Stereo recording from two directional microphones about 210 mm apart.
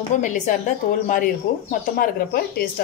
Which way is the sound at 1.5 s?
45° left (ahead or behind).